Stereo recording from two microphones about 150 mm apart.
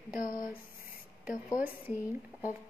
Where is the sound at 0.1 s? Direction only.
65° left (ahead or behind).